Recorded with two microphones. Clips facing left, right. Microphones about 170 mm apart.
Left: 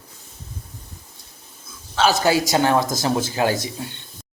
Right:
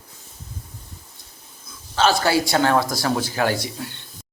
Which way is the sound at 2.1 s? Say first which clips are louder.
Left 1 dB; 15° left (ahead or behind).